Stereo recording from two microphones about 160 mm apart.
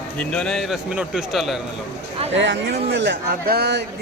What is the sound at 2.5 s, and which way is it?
Speech, 90° right.